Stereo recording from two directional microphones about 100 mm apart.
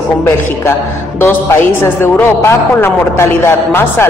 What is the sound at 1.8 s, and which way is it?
Speech, 25° left (ahead or behind).